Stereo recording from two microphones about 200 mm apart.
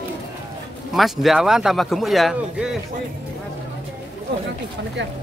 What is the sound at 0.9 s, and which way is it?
Speech, centre (ahead or behind).